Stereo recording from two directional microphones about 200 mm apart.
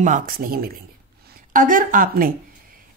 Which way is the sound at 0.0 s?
40° right (ahead or behind).